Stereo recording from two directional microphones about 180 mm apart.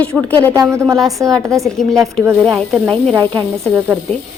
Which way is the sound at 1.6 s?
Centre (ahead or behind).